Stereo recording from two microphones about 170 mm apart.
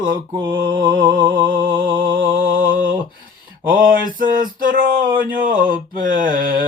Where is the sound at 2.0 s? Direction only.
55° right (ahead or behind).